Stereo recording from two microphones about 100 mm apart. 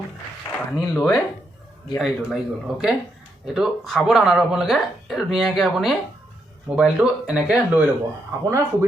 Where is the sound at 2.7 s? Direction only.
5° right (ahead or behind).